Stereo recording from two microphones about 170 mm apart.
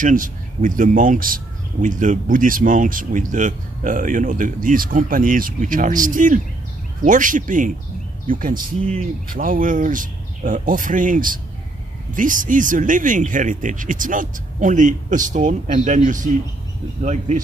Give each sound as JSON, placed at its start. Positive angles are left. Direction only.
{"t": 0.0, "sound": "speech", "side_deg": -50}
{"t": 8.8, "sound": "speech", "side_deg": -40}
{"t": 9.3, "sound": "speech", "side_deg": -55}